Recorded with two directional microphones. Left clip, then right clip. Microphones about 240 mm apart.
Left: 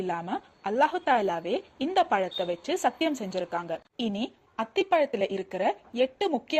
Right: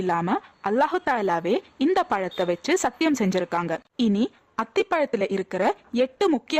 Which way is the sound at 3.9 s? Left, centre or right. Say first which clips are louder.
Right 7 dB; right.